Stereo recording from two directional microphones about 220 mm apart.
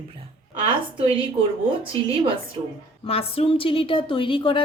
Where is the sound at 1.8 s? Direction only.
25° right (ahead or behind).